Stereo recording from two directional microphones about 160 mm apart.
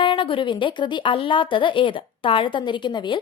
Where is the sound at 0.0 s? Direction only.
30° left (ahead or behind).